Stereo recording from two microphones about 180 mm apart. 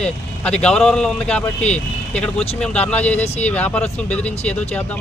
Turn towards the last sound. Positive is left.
turn(degrees=10)  # may be behind; listen again after turning